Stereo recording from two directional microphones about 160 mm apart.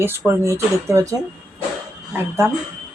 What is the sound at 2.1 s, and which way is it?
Speech, 15° right (ahead or behind).